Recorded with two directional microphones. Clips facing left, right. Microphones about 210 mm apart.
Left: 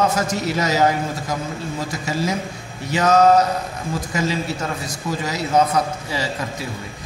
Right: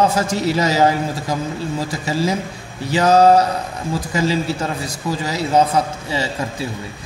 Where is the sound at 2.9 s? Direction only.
30° right (ahead or behind).